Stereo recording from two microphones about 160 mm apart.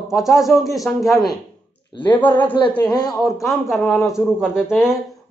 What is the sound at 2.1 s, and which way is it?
Speech, 10° left (ahead or behind).